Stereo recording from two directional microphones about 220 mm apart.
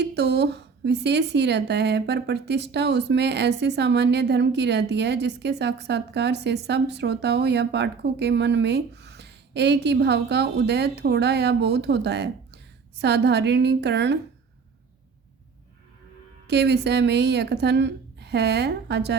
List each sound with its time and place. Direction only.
0.0 s speech: 50° right (ahead or behind)
16.5 s speech: 50° right (ahead or behind)